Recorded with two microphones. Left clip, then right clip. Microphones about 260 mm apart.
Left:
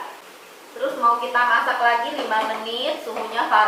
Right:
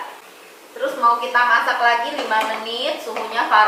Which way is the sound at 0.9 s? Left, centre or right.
Centre.